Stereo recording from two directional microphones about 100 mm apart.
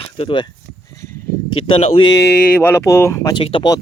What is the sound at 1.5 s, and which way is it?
Speech, 70° left (ahead or behind).